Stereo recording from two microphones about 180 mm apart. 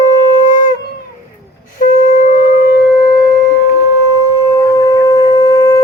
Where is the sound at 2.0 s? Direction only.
45° left (ahead or behind).